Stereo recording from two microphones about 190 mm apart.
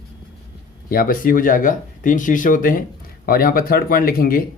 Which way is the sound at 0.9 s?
50° left (ahead or behind).